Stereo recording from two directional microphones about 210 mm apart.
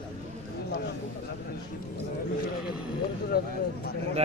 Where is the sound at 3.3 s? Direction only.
50° left (ahead or behind).